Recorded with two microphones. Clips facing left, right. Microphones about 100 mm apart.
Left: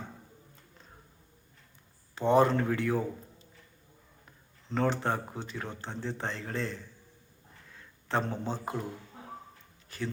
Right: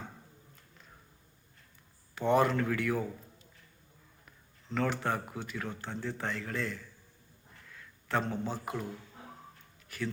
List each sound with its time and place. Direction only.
2.1 s speech: 25° left (ahead or behind)
7.7 s a sound: 25° left (ahead or behind)
9.9 s speech: 25° left (ahead or behind)